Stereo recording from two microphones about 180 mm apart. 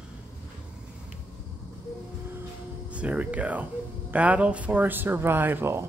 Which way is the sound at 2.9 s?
5° right (ahead or behind).